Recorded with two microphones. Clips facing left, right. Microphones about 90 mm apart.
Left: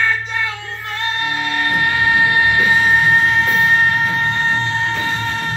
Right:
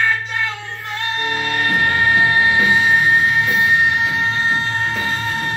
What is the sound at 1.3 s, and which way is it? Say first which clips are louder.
Music: right 1 dB; 35° right (ahead or behind).